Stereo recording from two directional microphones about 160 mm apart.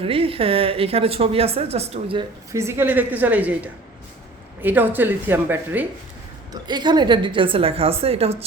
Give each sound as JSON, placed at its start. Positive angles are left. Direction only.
{"t": 0.0, "sound": "a woman's voice", "side_deg": -35}
{"t": 2.5, "sound": "a woman's voice", "side_deg": -15}
{"t": 6.5, "sound": "a woman's voice", "side_deg": -25}